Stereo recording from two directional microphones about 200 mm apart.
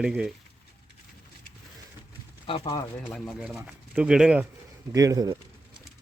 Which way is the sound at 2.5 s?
20° left (ahead or behind).